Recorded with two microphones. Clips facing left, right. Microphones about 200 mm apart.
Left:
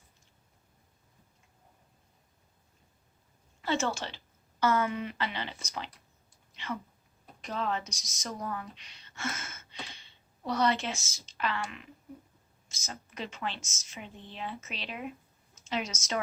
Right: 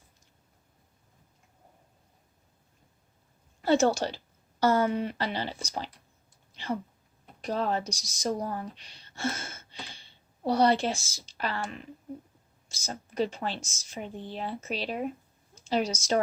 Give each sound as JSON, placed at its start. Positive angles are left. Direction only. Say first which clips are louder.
{"t": 3.6, "sound": "a woman's voice", "louder": "right 8 dB", "side_deg": -40}
{"t": 6.5, "sound": "a sound", "louder": "right 5 dB", "side_deg": -35}
{"t": 7.4, "sound": "a woman's voice", "louder": "right 5 dB", "side_deg": -35}